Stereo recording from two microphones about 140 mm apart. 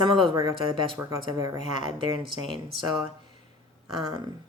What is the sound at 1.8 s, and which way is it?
Speech, 35° right (ahead or behind).